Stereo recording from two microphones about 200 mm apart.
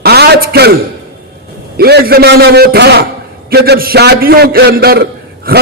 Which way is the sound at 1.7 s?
50° right (ahead or behind).